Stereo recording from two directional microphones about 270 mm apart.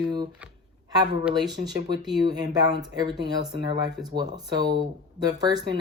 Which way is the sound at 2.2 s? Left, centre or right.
Centre.